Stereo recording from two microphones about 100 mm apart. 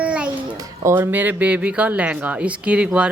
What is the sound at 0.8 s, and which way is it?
Speech, 25° right (ahead or behind).